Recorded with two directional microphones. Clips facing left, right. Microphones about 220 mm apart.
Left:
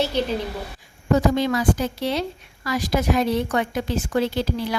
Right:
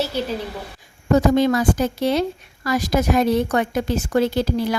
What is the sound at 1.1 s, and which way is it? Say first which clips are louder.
A woman's voice: right 3 dB; 45° right (ahead or behind).